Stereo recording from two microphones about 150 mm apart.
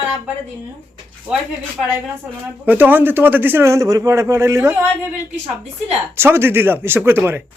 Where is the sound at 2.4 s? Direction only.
10° right (ahead or behind).